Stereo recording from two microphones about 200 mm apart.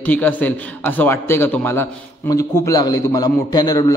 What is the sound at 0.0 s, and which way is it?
A man's voice, 10° left (ahead or behind).